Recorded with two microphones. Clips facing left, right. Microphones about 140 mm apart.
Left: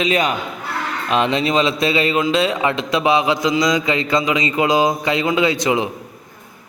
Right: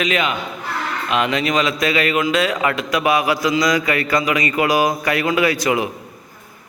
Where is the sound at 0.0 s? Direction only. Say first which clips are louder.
Left 2 dB; 35° left (ahead or behind).